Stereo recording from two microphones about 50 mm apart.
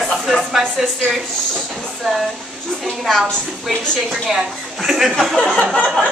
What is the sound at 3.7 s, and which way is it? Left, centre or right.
Speech, centre.